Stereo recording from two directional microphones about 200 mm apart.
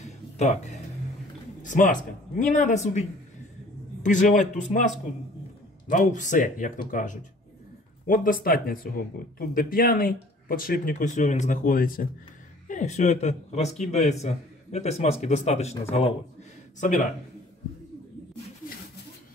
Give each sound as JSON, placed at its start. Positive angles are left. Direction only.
{"t": 0.0, "sound": "music", "side_deg": 35}
{"t": 1.6, "sound": "a man's voice", "side_deg": 40}
{"t": 5.9, "sound": "a man's voice", "side_deg": 40}
{"t": 16.8, "sound": "a man's voice", "side_deg": 40}